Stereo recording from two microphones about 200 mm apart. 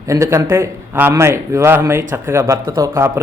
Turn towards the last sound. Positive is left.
turn(degrees=-10)  # may be behind; listen again after turning